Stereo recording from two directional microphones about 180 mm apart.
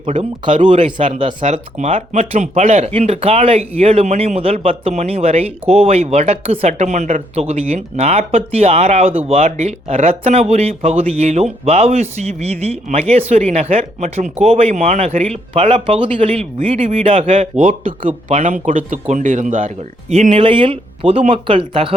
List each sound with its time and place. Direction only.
0.0 s speech: 30° right (ahead or behind)
1.4 s speech: 40° right (ahead or behind)